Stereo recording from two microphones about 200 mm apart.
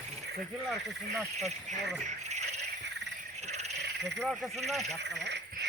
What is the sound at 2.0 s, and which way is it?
Cricket, 35° right (ahead or behind).